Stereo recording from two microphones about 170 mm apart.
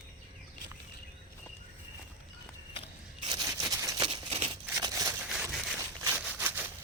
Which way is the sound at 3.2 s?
20° right (ahead or behind).